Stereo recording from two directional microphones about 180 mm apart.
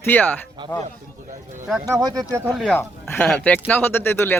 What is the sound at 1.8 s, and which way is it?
Speech, 20° right (ahead or behind).